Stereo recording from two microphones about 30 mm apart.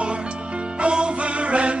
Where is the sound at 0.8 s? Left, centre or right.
Right.